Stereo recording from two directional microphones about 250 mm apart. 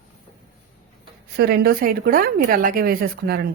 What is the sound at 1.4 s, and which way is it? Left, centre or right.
Speech, right.